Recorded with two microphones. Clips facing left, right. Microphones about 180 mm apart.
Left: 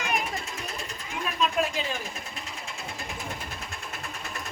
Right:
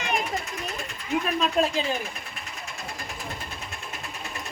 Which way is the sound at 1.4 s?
35° right (ahead or behind).